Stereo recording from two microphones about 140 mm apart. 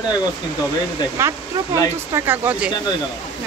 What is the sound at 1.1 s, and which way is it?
Speech, 20° right (ahead or behind).